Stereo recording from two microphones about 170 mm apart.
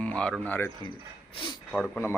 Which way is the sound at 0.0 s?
5° left (ahead or behind).